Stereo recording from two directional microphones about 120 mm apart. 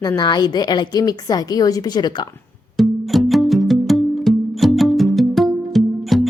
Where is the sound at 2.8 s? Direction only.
Centre (ahead or behind).